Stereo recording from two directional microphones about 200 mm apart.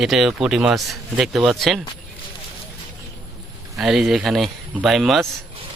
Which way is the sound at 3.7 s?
5° right (ahead or behind).